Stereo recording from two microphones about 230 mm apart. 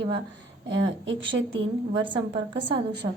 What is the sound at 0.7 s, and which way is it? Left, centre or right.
A woman's voice, right.